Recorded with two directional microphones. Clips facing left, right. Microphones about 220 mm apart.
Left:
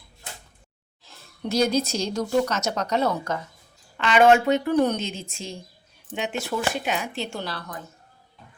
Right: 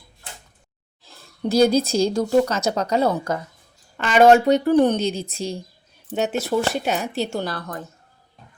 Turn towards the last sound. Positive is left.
turn(degrees=-50)  # may be behind; listen again after turning